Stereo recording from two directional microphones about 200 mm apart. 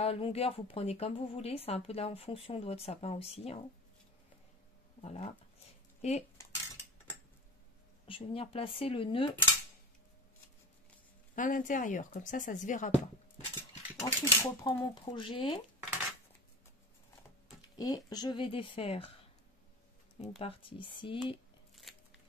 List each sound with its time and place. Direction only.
0.0 s speech: 30° left (ahead or behind)
5.0 s speech: 35° left (ahead or behind)
8.1 s speech: 25° left (ahead or behind)
11.3 s speech: 40° left (ahead or behind)
13.6 s speech: 15° left (ahead or behind)
17.6 s speech: 20° left (ahead or behind)
20.2 s speech: 30° left (ahead or behind)
21.9 s a sound: centre (ahead or behind)